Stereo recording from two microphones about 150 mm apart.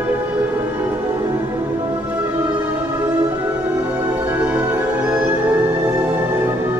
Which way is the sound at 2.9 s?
15° right (ahead or behind).